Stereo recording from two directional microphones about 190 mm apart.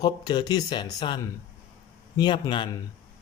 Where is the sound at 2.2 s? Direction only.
25° left (ahead or behind).